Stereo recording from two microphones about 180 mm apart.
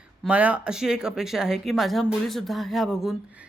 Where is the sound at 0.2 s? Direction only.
5° right (ahead or behind).